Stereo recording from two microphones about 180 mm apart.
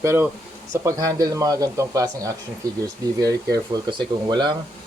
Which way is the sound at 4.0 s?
25° right (ahead or behind).